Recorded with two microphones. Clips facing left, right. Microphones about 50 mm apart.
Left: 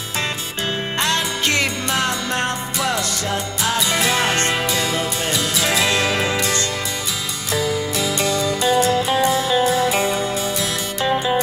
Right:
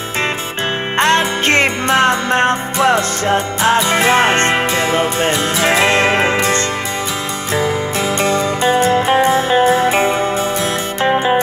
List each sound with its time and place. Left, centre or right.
0.9 s music: right
8.2 s music: right